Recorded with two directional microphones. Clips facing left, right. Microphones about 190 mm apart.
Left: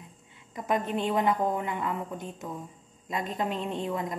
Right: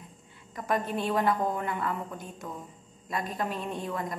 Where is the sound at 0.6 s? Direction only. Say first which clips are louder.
Left 1 dB; 20° left (ahead or behind).